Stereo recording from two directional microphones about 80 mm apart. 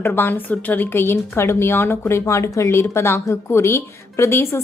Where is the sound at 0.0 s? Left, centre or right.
Left.